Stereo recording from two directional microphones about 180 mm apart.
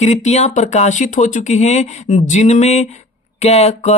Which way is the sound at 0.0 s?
40° left (ahead or behind).